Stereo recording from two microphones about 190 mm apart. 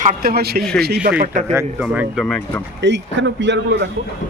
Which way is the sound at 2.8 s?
65° right (ahead or behind).